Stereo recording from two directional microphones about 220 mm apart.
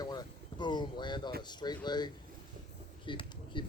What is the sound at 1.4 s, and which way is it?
Speech, 20° left (ahead or behind).